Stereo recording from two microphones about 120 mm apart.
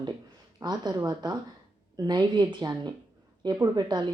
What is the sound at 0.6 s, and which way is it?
Speech, 35° right (ahead or behind).